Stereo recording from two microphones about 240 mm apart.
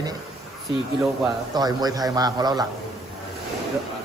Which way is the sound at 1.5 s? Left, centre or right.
Centre.